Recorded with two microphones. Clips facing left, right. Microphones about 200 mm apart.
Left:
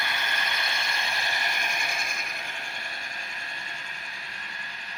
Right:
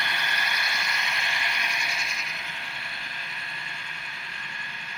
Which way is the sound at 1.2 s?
45° left (ahead or behind).